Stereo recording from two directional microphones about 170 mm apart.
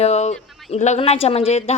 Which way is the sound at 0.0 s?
40° left (ahead or behind).